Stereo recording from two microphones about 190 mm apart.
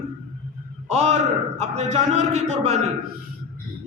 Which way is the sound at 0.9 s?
35° right (ahead or behind).